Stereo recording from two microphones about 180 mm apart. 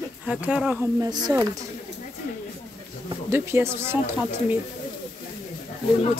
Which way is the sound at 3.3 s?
15° right (ahead or behind).